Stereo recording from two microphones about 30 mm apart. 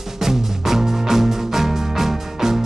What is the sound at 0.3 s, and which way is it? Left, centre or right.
Music, centre.